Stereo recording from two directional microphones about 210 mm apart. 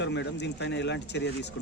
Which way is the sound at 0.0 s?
55° left (ahead or behind).